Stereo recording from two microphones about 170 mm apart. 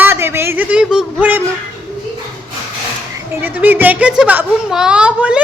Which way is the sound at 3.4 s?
10° right (ahead or behind).